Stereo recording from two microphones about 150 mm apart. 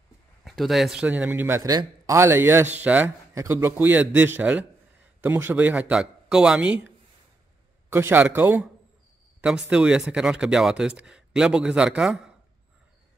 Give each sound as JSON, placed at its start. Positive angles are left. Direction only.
{"t": 0.4, "sound": "speech", "side_deg": 0}
{"t": 1.6, "sound": "a man's voice", "side_deg": -25}
{"t": 7.9, "sound": "a man's voice", "side_deg": -15}